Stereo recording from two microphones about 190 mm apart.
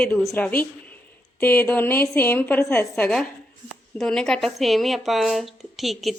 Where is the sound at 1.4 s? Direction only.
10° left (ahead or behind).